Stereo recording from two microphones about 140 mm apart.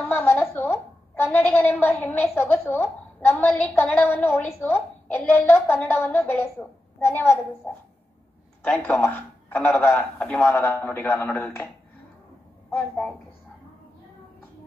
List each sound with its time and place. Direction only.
0.1 s a sound: 15° left (ahead or behind)
2.3 s a woman's voice: 15° left (ahead or behind)
8.6 s a woman's voice: 10° left (ahead or behind)
12.7 s a woman's voice: 10° left (ahead or behind)